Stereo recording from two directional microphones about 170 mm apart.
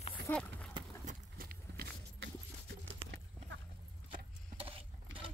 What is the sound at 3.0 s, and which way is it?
Clip-clop, 35° right (ahead or behind).